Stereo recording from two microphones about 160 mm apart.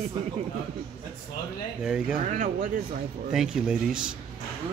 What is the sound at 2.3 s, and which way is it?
Speech, 50° right (ahead or behind).